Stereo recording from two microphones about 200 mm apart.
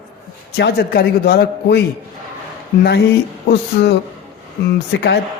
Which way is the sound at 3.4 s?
55° left (ahead or behind).